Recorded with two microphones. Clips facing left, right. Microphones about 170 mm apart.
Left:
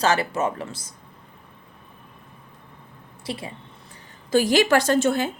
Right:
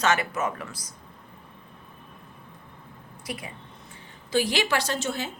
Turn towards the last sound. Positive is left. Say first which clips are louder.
# left 9 dB
turn(degrees=55)  # may be behind; listen again after turning